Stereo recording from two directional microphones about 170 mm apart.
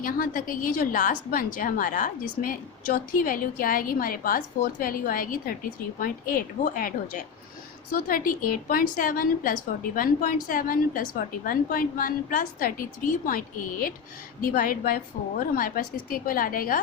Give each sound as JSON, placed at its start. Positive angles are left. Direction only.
{"t": 0.0, "sound": "a woman's voice", "side_deg": 55}